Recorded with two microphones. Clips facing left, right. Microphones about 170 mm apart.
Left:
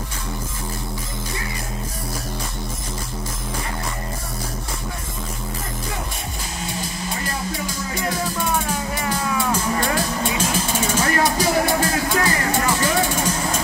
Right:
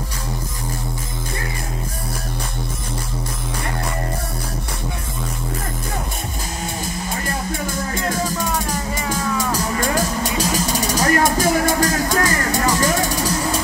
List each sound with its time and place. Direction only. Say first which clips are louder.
7.6 s speech: right 2 dB; 50° right (ahead or behind)
8.7 s music: right 1 dB; 5° left (ahead or behind)
9.5 s music: even; 40° right (ahead or behind)